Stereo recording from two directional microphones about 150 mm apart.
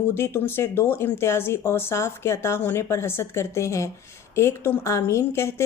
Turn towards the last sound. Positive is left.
turn(degrees=15)  # may be behind; listen again after turning